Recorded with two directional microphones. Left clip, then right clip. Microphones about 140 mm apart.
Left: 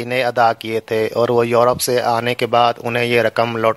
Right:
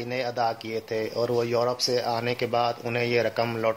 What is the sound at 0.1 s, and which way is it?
Speech, 40° left (ahead or behind).